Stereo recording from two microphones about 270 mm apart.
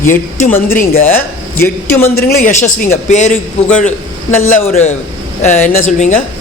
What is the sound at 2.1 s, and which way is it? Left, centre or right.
A man's voice, left.